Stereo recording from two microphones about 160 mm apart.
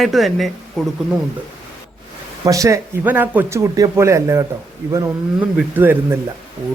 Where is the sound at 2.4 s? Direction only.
20° right (ahead or behind).